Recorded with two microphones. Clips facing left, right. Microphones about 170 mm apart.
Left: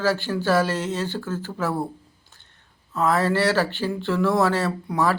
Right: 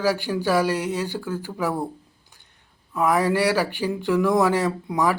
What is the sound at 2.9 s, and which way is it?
A man's voice, 15° right (ahead or behind).